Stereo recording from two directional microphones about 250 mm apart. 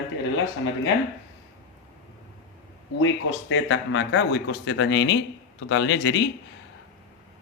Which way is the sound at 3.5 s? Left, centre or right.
Left.